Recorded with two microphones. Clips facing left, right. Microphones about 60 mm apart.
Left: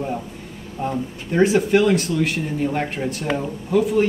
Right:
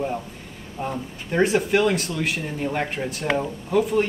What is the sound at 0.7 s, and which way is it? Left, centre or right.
Speech, centre.